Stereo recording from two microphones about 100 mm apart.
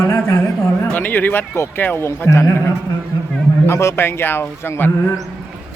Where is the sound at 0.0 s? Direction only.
25° left (ahead or behind).